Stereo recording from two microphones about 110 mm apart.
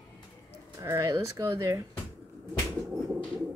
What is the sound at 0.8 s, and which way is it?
A woman's voice, 30° right (ahead or behind).